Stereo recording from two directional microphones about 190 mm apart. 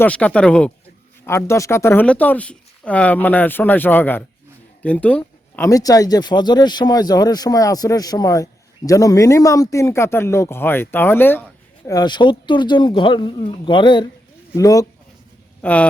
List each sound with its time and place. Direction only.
0.0 s speech: 5° left (ahead or behind)
11.9 s speech: 20° left (ahead or behind)
15.6 s speech: 5° left (ahead or behind)